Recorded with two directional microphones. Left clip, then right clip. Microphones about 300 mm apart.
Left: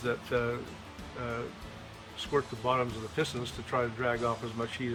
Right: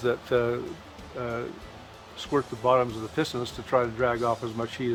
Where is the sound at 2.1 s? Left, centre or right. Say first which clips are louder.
Right 3 dB; centre.